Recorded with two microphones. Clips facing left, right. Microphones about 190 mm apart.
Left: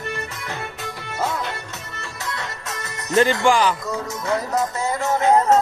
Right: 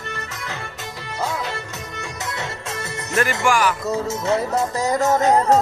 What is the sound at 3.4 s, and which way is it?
Speech, 20° left (ahead or behind).